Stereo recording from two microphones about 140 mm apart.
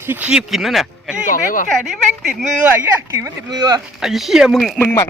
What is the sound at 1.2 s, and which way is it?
Speech, 80° left.